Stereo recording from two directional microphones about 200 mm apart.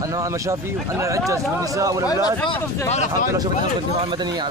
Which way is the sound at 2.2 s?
25° left (ahead or behind).